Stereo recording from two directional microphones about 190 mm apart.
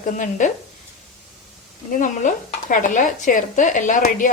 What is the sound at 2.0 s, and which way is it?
Stir, 40° left (ahead or behind).